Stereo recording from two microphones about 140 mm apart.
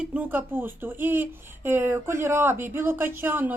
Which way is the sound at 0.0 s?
10° right (ahead or behind).